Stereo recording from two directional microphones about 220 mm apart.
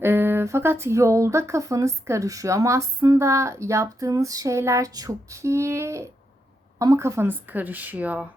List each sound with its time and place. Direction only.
0.0 s speech: 10° right (ahead or behind)